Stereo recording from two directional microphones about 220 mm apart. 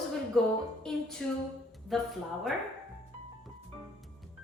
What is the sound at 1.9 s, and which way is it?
Speech, centre (ahead or behind).